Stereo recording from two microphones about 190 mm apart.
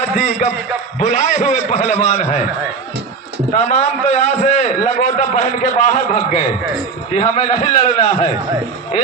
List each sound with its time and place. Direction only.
0.2 s a man's voice: 35° left (ahead or behind)
3.5 s a man's voice: 35° left (ahead or behind)